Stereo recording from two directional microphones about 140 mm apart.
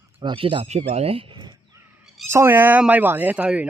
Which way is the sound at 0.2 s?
40° right (ahead or behind).